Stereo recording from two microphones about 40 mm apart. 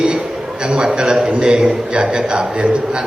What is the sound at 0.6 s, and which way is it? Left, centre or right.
A man's voice, centre.